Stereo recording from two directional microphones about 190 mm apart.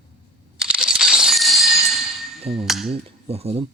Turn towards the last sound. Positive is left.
turn(degrees=-30)  # may be behind; listen again after turning